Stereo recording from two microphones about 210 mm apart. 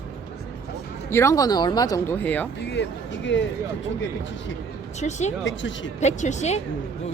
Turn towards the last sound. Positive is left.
turn(degrees=35)  # may be behind; listen again after turning